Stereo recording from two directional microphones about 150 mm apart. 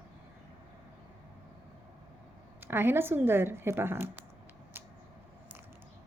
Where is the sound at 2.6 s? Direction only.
15° right (ahead or behind).